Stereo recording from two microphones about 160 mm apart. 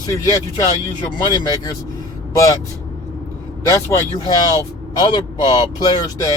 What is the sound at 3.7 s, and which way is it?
Speech, 25° left (ahead or behind).